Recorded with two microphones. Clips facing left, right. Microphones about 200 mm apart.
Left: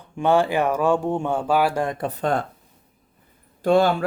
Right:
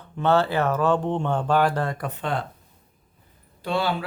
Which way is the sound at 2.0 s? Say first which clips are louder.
Left 5 dB; 35° left (ahead or behind).